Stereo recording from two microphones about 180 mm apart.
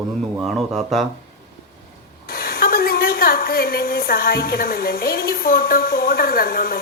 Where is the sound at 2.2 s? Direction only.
55° left (ahead or behind).